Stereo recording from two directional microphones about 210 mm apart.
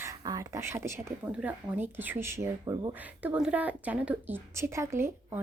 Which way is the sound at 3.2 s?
5° right (ahead or behind).